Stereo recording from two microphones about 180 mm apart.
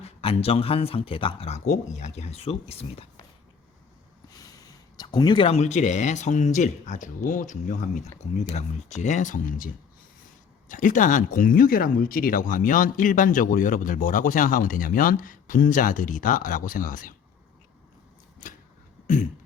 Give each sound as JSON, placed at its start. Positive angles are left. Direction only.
{"t": 0.0, "sound": "speech", "side_deg": 35}
{"t": 4.4, "sound": "speech", "side_deg": 20}
{"t": 10.7, "sound": "speech", "side_deg": 45}
{"t": 19.0, "sound": "cough", "side_deg": 45}